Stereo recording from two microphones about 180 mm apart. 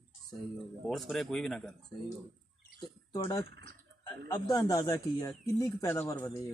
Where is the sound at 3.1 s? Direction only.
20° left (ahead or behind).